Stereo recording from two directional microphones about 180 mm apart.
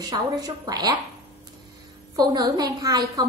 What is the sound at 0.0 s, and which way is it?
Speech, 20° right (ahead or behind).